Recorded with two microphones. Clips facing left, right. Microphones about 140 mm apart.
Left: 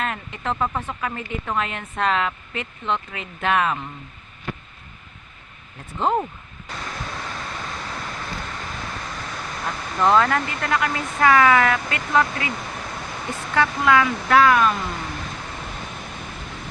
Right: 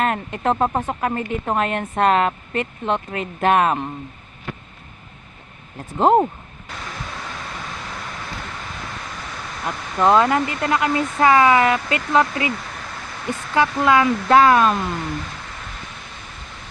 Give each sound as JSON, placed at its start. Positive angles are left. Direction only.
{"t": 0.0, "sound": "speech", "side_deg": -50}
{"t": 0.5, "sound": "speech", "side_deg": -40}
{"t": 6.0, "sound": "speech", "side_deg": -45}
{"t": 9.6, "sound": "speech", "side_deg": -15}
{"t": 13.6, "sound": "speech", "side_deg": -25}